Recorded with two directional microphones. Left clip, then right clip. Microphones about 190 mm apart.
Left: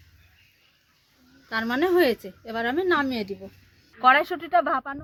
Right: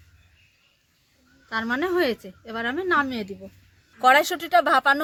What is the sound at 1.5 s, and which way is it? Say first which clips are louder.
Speech: left 1 dB; 20° left (ahead or behind).